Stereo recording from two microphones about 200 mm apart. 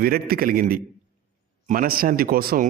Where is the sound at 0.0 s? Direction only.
50° right (ahead or behind).